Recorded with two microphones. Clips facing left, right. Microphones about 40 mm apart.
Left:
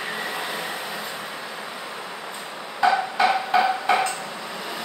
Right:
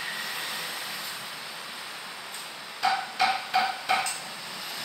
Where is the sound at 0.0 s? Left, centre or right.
Centre.